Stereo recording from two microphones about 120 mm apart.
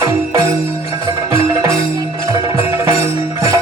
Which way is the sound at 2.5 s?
20° right (ahead or behind).